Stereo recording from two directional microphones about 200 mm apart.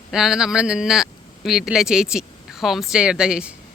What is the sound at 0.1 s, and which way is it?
Speech, centre (ahead or behind).